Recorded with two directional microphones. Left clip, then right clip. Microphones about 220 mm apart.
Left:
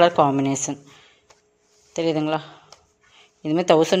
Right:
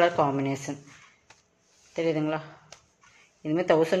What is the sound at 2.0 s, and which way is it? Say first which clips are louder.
Speech: left 5 dB; 35° left (ahead or behind).